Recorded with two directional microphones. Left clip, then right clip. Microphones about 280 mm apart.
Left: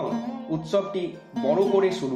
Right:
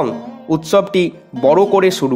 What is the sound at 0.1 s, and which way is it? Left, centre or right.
Speech, centre.